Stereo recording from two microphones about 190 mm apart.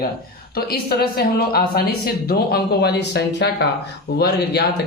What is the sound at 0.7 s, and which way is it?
Speech, 55° left (ahead or behind).